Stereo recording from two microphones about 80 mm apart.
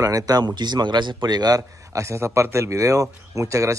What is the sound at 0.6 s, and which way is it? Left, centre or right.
A man's voice, right.